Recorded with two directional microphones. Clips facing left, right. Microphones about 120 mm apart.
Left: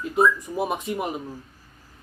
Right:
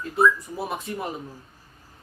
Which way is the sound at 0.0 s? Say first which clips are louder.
Left 1 dB; 15° left (ahead or behind).